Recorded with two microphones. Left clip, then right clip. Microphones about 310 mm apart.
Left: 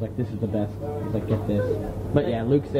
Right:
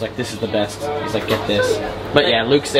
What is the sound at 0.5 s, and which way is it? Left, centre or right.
A man's voice, centre.